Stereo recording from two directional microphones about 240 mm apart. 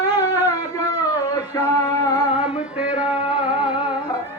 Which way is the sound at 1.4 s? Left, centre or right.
Centre.